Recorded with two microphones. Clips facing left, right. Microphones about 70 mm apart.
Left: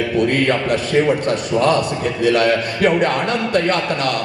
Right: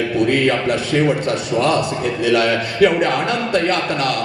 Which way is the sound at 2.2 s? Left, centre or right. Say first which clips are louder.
Left 2 dB; left.